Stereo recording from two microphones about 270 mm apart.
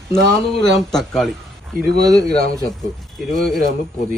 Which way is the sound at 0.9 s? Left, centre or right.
Centre.